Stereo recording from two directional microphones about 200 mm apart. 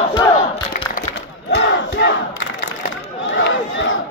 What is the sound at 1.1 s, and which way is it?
Crowd, 60° left (ahead or behind).